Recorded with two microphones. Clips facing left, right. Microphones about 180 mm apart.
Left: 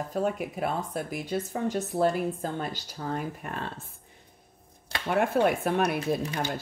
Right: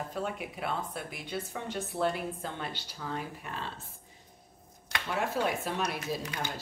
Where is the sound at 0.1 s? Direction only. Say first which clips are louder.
Left 7 dB; 45° left (ahead or behind).